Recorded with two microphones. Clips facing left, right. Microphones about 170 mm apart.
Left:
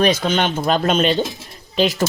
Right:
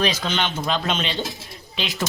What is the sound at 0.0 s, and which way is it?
Speech, 50° left (ahead or behind).